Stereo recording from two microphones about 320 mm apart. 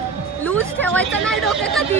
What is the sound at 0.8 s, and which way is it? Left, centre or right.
Speech, centre.